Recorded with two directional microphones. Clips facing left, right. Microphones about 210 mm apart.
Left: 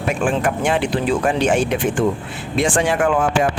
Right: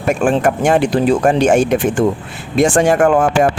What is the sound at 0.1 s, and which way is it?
Speech, 45° right (ahead or behind).